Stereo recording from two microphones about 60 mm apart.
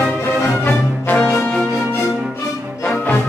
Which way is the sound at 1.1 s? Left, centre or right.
Left.